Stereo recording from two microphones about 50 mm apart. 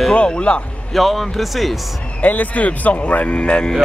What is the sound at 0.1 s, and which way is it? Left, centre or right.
Speech, left.